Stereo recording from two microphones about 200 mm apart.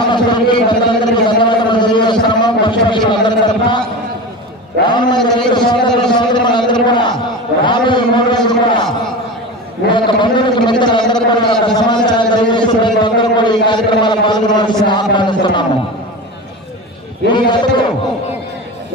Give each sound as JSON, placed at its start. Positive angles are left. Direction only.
{"t": 0.0, "sound": "a man's voice", "side_deg": 20}
{"t": 4.9, "sound": "a man's voice", "side_deg": 20}
{"t": 9.9, "sound": "a man's voice", "side_deg": 25}
{"t": 17.3, "sound": "a man's voice", "side_deg": 25}